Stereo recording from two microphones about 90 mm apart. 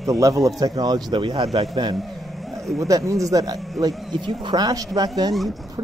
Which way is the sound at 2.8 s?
40° right (ahead or behind).